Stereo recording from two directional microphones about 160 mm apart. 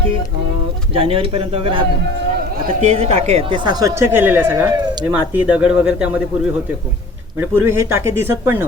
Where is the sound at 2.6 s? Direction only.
45° right (ahead or behind); by 8.7 s 15° right (ahead or behind).